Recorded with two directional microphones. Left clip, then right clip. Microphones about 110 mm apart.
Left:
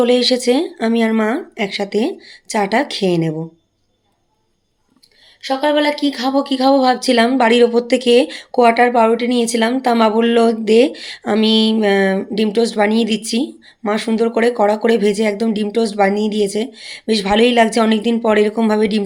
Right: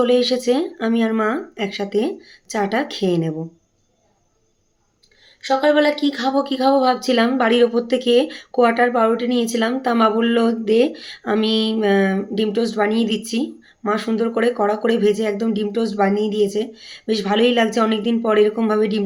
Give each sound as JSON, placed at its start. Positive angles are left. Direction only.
{"t": 0.0, "sound": "speech", "side_deg": 35}
{"t": 5.4, "sound": "speech", "side_deg": 30}